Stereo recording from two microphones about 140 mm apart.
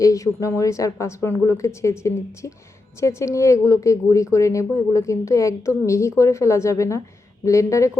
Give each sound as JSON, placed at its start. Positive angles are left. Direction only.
{"t": 0.0, "sound": "a woman's voice", "side_deg": 25}